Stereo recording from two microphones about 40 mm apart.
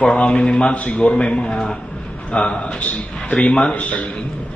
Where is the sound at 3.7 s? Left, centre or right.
Left.